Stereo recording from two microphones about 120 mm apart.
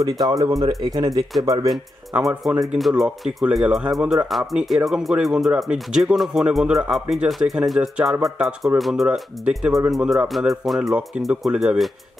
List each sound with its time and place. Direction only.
0.2 s speech: 30° right (ahead or behind)
2.6 s speech: centre (ahead or behind)